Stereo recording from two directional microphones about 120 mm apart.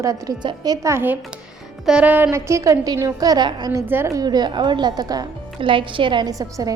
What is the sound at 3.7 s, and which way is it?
A woman's voice, 20° right (ahead or behind).